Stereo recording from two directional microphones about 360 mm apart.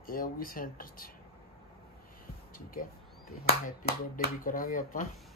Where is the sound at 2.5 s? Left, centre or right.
Left.